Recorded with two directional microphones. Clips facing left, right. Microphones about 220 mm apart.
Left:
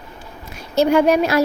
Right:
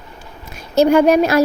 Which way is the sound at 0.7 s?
45° right (ahead or behind).